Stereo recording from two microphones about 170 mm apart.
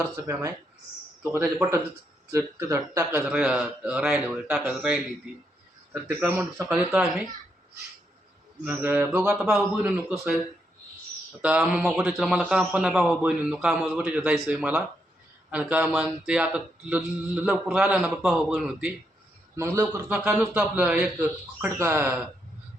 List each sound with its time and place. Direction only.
0.2 s speech: 20° right (ahead or behind)
1.2 s a man's voice: 10° right (ahead or behind)
3.2 s a man's voice: 5° right (ahead or behind)
8.6 s a man's voice: 10° right (ahead or behind)
11.4 s a man's voice: 5° right (ahead or behind)
19.7 s speech: 20° right (ahead or behind)
20.1 s a man's voice: 5° right (ahead or behind)